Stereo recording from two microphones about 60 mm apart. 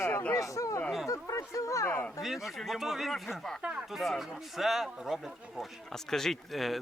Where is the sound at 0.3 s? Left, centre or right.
Left.